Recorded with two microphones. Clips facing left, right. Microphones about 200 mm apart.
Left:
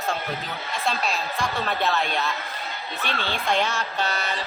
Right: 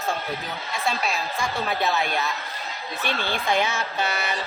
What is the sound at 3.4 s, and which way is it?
Speech, 5° right (ahead or behind).